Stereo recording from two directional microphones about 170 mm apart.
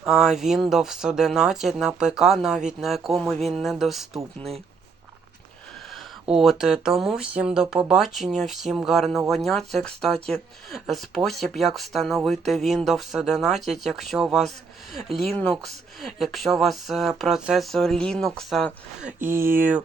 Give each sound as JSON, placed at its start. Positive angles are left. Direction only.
{"t": 0.0, "sound": "speech", "side_deg": -5}
{"t": 4.4, "sound": "speech", "side_deg": -35}
{"t": 5.9, "sound": "speech", "side_deg": 0}
{"t": 19.2, "sound": "speech", "side_deg": -15}